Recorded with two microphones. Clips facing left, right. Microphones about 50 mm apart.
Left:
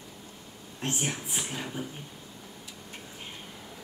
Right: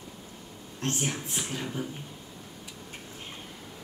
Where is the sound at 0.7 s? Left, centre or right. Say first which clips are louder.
Right 1 dB; centre.